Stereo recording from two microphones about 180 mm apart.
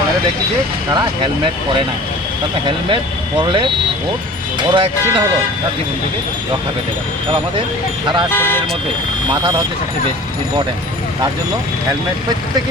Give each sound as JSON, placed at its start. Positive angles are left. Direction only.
{"t": 0.9, "sound": "speech", "side_deg": -25}
{"t": 2.6, "sound": "speech", "side_deg": -25}
{"t": 4.7, "sound": "speech", "side_deg": -25}
{"t": 8.3, "sound": "speech", "side_deg": 10}